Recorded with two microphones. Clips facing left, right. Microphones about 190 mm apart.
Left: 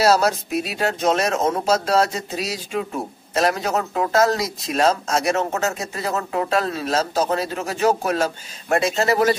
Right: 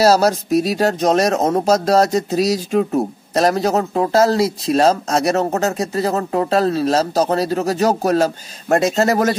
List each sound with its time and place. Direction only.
0.0 s speech: 35° right (ahead or behind)